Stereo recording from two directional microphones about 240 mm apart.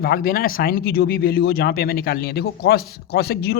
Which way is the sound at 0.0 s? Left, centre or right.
Left.